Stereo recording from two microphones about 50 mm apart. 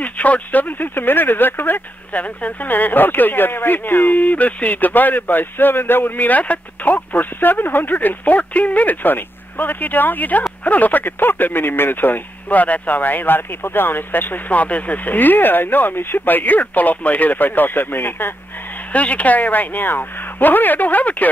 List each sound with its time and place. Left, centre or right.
0.0 s speech: left
18.9 s speech: left